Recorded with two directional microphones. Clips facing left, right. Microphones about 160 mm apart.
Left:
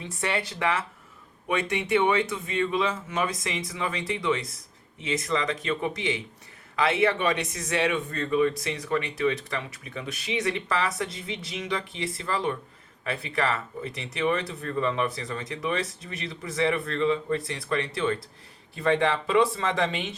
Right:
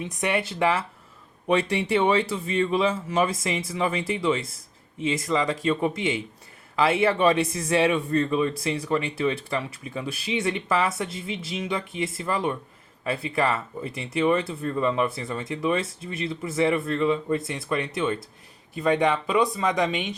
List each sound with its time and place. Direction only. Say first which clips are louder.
0.1 s speech: right 2 dB; 20° right (ahead or behind)